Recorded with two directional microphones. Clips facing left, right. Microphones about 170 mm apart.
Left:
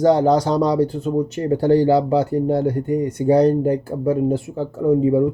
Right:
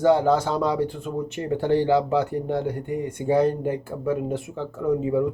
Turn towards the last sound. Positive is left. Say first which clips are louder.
# left 6 dB
turn(degrees=35)  # may be behind; listen again after turning